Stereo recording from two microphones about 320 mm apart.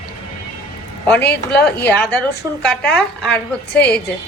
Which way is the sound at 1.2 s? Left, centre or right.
Left.